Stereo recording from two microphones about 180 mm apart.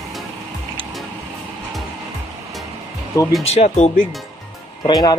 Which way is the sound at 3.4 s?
35° left (ahead or behind).